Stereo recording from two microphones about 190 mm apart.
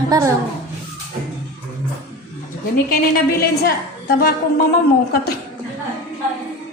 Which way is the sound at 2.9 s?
50° left (ahead or behind).